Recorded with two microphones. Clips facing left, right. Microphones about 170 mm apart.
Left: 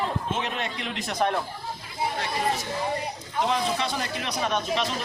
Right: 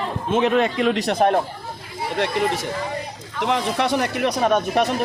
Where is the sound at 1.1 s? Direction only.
55° right (ahead or behind).